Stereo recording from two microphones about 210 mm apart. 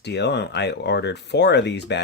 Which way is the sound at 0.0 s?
55° left (ahead or behind).